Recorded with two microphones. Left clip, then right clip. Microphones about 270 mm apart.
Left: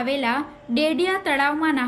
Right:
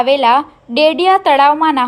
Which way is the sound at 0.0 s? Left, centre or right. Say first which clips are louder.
Right 13 dB; centre.